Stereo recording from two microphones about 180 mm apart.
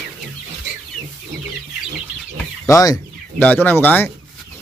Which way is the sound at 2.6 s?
20° left (ahead or behind).